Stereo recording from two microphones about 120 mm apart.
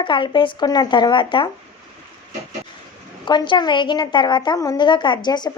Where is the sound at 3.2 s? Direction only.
40° left (ahead or behind).